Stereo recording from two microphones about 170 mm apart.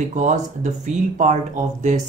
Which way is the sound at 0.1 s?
50° right (ahead or behind).